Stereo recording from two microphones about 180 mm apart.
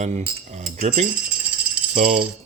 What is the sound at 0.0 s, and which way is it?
Cutlery, 40° right (ahead or behind).